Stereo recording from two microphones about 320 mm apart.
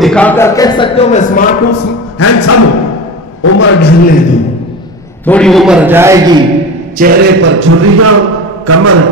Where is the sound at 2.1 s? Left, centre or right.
Left.